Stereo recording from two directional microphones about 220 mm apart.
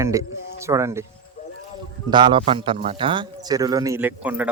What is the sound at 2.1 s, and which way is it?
Speech, 20° right (ahead or behind).